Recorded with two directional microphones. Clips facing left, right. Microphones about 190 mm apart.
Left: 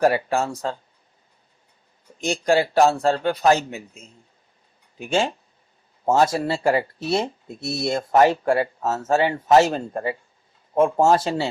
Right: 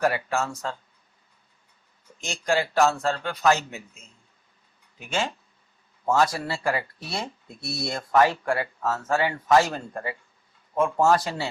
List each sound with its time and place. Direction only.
0.0 s speech: 30° left (ahead or behind)
2.2 s speech: 35° left (ahead or behind)
4.9 s speech: 30° left (ahead or behind)